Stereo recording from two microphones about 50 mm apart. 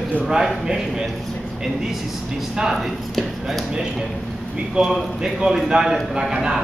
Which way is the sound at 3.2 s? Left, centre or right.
Centre.